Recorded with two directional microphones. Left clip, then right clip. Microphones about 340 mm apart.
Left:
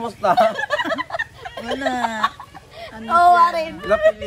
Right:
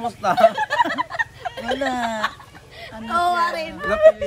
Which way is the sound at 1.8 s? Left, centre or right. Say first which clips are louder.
Left 3 dB; centre.